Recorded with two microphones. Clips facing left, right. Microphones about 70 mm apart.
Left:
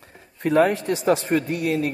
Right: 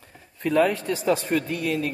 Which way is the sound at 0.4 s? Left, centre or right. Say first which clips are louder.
Left 3 dB; left.